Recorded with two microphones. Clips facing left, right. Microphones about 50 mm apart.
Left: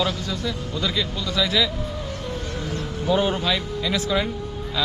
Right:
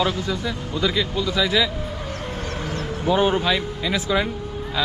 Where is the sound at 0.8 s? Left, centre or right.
Centre.